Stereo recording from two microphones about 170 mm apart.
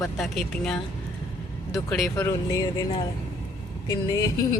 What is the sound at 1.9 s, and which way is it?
Speech, 10° left (ahead or behind).